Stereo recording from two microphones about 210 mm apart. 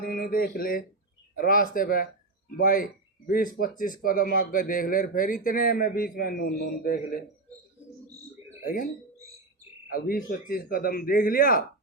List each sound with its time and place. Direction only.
0.0 s speech: 45° left (ahead or behind)
8.6 s speech: 40° left (ahead or behind)
9.9 s speech: 45° left (ahead or behind)